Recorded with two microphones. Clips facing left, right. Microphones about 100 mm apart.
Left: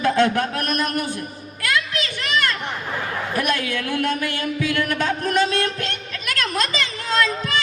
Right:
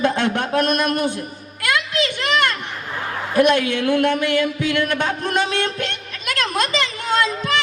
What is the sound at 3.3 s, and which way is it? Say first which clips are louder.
Speech: right 9 dB; 25° right (ahead or behind).